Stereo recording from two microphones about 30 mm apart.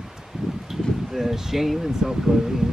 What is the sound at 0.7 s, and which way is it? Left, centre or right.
Speech, centre.